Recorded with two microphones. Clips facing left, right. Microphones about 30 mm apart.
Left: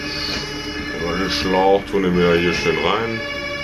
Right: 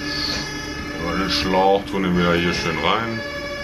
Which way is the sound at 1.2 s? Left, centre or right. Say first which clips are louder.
Left 1 dB; centre.